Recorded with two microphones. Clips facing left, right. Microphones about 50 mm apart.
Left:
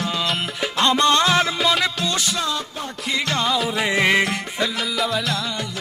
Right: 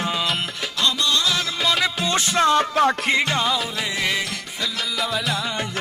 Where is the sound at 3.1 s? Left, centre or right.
Centre.